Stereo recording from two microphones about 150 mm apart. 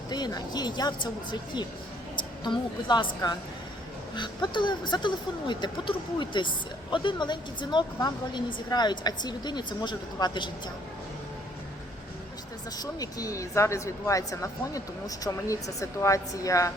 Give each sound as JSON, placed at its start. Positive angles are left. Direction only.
{"t": 0.1, "sound": "a woman's voice", "side_deg": 25}
{"t": 4.1, "sound": "speech", "side_deg": 30}
{"t": 12.7, "sound": "speech", "side_deg": 25}